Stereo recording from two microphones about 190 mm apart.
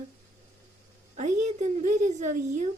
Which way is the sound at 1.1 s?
40° right (ahead or behind).